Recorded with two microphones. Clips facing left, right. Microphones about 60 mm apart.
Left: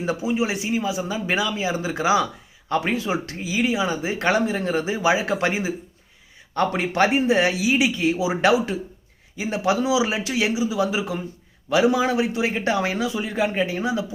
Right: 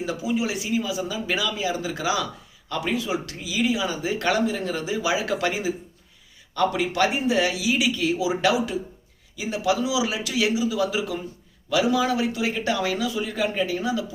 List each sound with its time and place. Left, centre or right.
0.0 s speech: left